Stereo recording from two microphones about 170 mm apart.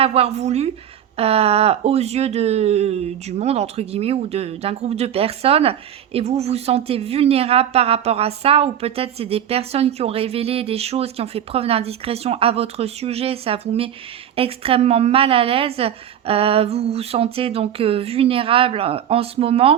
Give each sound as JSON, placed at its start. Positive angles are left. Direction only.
{"t": 0.0, "sound": "a woman's voice", "side_deg": -35}